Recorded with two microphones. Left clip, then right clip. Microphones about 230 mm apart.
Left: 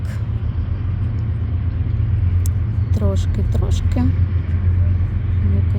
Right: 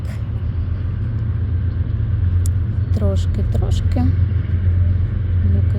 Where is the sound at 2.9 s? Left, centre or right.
Centre.